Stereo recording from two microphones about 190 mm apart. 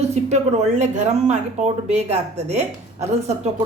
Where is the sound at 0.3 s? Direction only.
35° right (ahead or behind).